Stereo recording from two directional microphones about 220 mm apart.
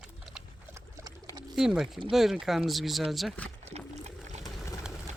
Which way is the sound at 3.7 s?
30° right (ahead or behind).